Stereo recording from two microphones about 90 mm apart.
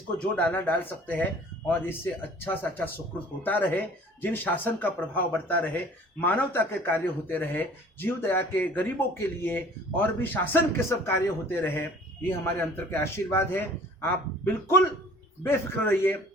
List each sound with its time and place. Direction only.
0.3 s speech: 15° left (ahead or behind)